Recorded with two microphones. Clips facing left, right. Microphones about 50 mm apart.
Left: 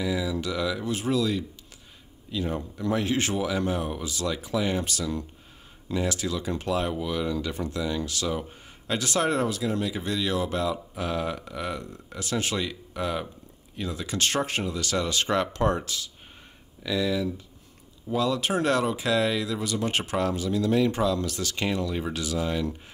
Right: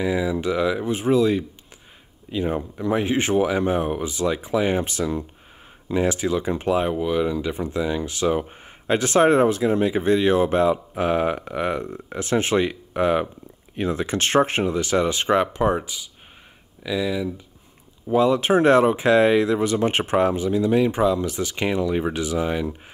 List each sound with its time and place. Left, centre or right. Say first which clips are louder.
0.0 s speech: right 6 dB; right
18.0 s speech: right 7 dB; right